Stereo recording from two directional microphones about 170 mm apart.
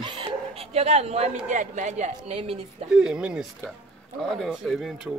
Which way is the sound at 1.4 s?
45° right (ahead or behind).